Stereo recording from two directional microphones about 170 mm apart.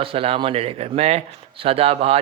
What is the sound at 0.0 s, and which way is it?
Speech, 35° right (ahead or behind).